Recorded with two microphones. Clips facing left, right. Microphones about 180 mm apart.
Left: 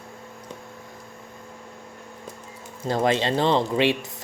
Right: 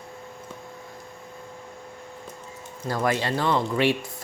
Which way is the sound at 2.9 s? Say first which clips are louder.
Left 3 dB; 20° left (ahead or behind).